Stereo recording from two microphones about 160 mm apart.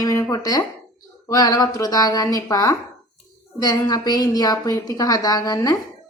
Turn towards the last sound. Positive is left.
turn(degrees=20)  # may be behind; listen again after turning